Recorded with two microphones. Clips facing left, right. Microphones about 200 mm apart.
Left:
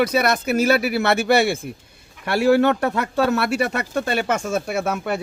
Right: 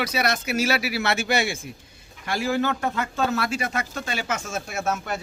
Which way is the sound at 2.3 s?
65° left (ahead or behind).